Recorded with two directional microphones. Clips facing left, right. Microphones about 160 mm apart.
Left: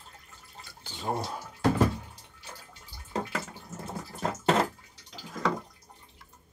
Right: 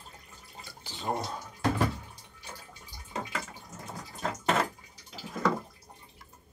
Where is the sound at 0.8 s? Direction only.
Centre (ahead or behind).